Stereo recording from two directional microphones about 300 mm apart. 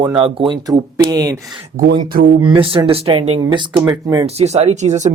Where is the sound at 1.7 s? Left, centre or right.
Right.